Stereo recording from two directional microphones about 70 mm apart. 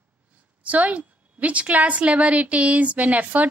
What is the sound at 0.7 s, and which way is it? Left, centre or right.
A woman's voice, right.